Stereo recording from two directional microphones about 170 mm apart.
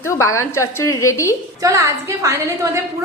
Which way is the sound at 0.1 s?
15° left (ahead or behind).